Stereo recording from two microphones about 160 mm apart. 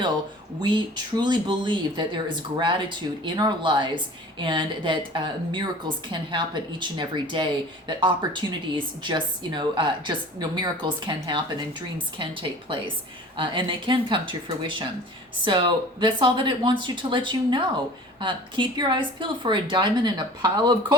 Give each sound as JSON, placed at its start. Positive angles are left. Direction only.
{"t": 0.6, "sound": "speech", "side_deg": -30}